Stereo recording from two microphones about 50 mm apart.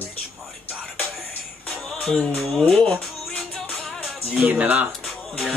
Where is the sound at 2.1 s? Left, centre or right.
Centre.